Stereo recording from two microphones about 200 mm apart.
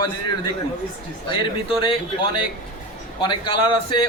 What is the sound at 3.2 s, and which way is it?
Speech, 25° left (ahead or behind).